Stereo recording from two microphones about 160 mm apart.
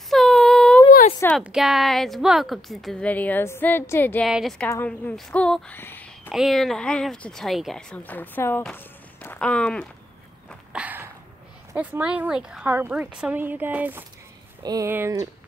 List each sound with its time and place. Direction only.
0.1 s a sound: centre (ahead or behind)
1.4 s a woman's voice: centre (ahead or behind)
4.3 s a woman's voice: 5° right (ahead or behind)
4.6 s a woman's voice: 10° left (ahead or behind)
6.3 s a woman's voice: centre (ahead or behind)
8.6 s walk: 10° left (ahead or behind)
10.7 s a sound: 10° right (ahead or behind)
11.7 s a woman's voice: 10° right (ahead or behind)
14.6 s a woman's voice: 25° right (ahead or behind)